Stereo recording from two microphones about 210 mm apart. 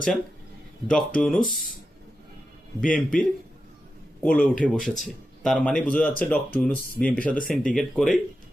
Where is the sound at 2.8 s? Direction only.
40° left (ahead or behind).